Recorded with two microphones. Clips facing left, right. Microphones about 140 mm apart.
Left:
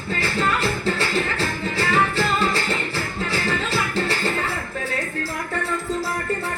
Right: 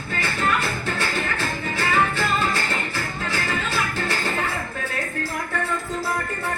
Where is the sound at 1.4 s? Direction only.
35° left (ahead or behind).